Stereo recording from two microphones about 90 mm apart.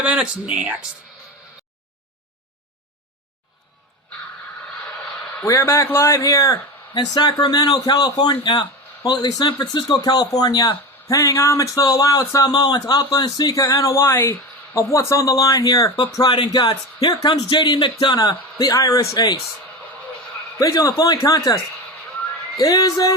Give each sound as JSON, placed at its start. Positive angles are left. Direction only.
{"t": 0.0, "sound": "speech", "side_deg": -15}
{"t": 5.5, "sound": "speech", "side_deg": 30}
{"t": 6.9, "sound": "speech", "side_deg": 50}
{"t": 16.3, "sound": "speech", "side_deg": 60}
{"t": 16.6, "sound": "speech", "side_deg": 45}
{"t": 17.5, "sound": "speech", "side_deg": 60}
{"t": 18.2, "sound": "speech", "side_deg": 50}
{"t": 20.6, "sound": "speech", "side_deg": 40}
{"t": 22.5, "sound": "speech", "side_deg": 40}